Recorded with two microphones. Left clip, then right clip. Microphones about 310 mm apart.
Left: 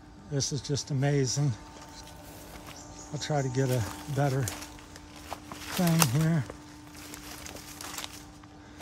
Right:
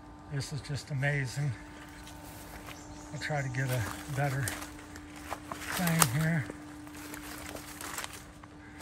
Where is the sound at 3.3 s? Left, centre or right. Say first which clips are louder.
Left 5 dB; left.